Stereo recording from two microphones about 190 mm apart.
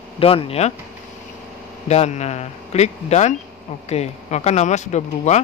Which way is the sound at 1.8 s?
35° left (ahead or behind).